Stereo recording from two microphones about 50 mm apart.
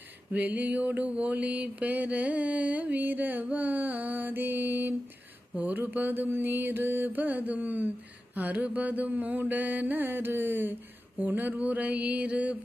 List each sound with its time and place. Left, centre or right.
0.3 s mantra: right